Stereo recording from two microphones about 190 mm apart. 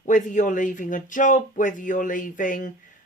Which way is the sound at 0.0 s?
40° left (ahead or behind).